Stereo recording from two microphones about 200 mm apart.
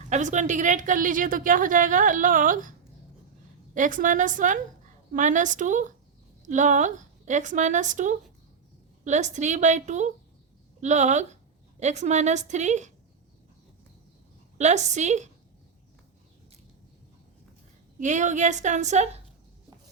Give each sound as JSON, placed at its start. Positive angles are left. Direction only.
{"t": 0.1, "sound": "a woman's voice", "side_deg": -40}
{"t": 3.8, "sound": "a woman's voice", "side_deg": -40}
{"t": 14.6, "sound": "a woman's voice", "side_deg": -35}
{"t": 18.0, "sound": "a woman's voice", "side_deg": -35}